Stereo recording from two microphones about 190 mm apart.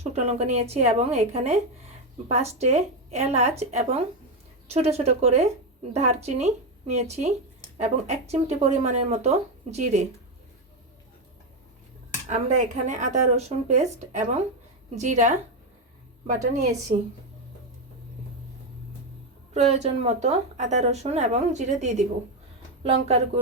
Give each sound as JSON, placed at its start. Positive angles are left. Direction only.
{"t": 0.0, "sound": "speech", "side_deg": -35}
{"t": 12.3, "sound": "speech", "side_deg": -40}
{"t": 16.9, "sound": "speech", "side_deg": -35}
{"t": 19.5, "sound": "speech", "side_deg": -35}